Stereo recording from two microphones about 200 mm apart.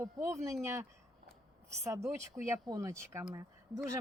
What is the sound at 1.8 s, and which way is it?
Speech, 15° right (ahead or behind).